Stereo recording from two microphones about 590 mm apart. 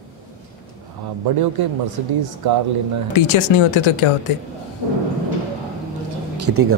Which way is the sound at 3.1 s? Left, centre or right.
Left.